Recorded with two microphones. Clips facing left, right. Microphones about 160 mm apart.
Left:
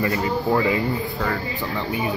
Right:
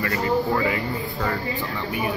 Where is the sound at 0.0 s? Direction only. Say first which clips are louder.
Even; 20° left (ahead or behind).